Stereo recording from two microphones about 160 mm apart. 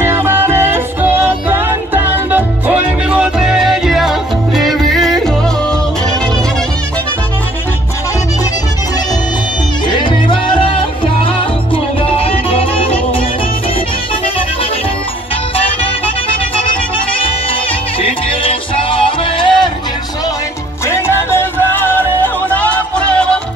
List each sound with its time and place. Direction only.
0.0 s music: 15° right (ahead or behind)
9.8 s music: 30° left (ahead or behind)
18.0 s music: 35° left (ahead or behind)
20.9 s music: 15° left (ahead or behind)